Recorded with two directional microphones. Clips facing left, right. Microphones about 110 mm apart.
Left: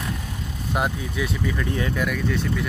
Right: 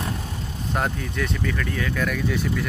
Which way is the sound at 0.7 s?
10° left (ahead or behind).